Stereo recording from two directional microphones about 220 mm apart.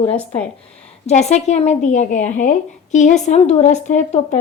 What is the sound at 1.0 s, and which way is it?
A woman's voice, 30° left (ahead or behind).